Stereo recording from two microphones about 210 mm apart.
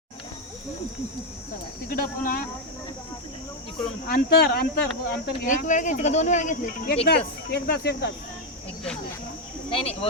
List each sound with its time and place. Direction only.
1.9 s speech: 40° left (ahead or behind)
4.0 s speech: 45° left (ahead or behind)
7.1 s speech: 50° left (ahead or behind)
9.6 s speech: 30° left (ahead or behind)